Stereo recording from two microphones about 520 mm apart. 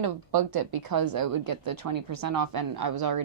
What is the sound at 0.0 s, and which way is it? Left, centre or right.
A woman's voice, right.